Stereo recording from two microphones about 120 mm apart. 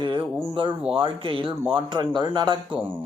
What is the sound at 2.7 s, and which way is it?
Speech, 15° right (ahead or behind).